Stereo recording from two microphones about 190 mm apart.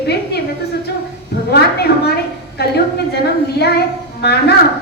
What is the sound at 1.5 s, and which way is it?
A woman's voice, 60° left (ahead or behind).